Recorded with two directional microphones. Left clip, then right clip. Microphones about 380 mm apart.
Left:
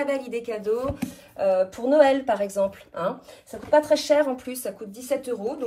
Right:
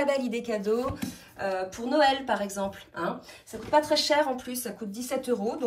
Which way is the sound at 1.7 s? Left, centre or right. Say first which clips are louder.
Left 3 dB; centre.